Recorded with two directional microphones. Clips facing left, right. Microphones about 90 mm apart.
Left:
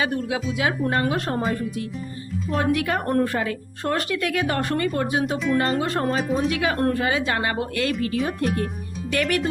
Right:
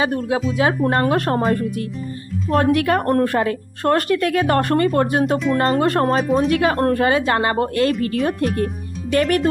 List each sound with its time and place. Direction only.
0.0 s a woman's voice: 40° right (ahead or behind); by 3.4 s 60° right (ahead or behind)
3.4 s speech: 50° right (ahead or behind)
6.2 s speech: centre (ahead or behind)
6.5 s speech: 45° right (ahead or behind)